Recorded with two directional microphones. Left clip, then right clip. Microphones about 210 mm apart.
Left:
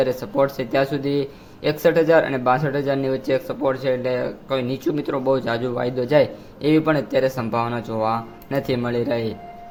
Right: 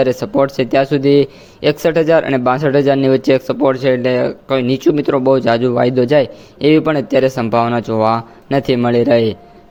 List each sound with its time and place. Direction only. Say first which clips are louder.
0.0 s speech: right 6 dB; 35° right (ahead or behind)